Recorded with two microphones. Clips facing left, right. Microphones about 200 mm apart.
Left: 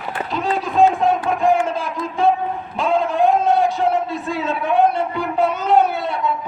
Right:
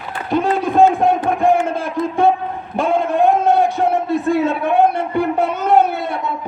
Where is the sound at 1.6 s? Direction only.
55° right (ahead or behind).